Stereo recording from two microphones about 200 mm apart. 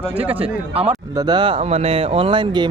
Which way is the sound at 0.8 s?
25° right (ahead or behind).